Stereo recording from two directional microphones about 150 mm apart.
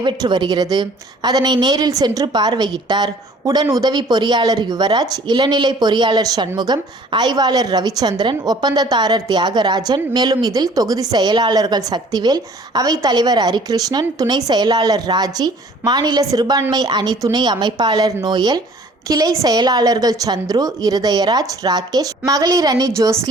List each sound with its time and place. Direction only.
0.0 s a woman's voice: 30° right (ahead or behind)